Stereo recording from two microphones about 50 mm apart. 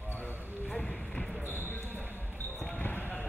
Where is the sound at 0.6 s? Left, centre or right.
Centre.